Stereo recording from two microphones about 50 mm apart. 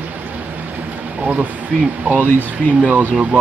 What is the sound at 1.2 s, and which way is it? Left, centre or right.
Speech, right.